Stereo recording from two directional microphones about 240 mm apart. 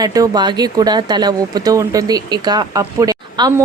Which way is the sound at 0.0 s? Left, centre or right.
Centre.